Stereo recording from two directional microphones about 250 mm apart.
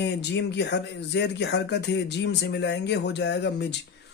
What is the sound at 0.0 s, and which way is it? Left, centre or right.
Speech, left.